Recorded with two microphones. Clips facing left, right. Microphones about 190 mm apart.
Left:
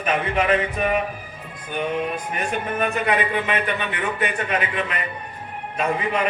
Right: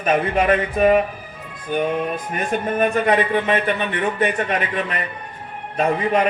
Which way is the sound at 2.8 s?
40° right (ahead or behind).